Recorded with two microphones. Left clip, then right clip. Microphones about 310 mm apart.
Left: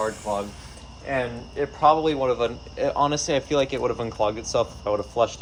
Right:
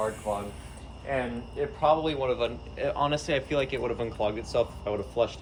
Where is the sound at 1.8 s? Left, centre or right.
Left.